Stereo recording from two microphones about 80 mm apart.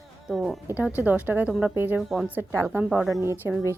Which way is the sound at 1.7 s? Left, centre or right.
Right.